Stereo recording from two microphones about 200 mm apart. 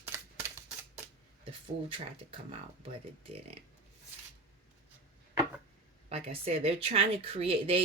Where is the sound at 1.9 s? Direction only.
25° right (ahead or behind).